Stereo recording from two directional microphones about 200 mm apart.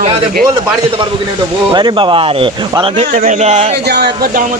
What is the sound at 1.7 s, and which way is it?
Speech, 25° right (ahead or behind).